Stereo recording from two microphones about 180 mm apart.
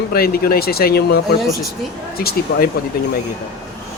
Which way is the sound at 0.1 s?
55° left (ahead or behind).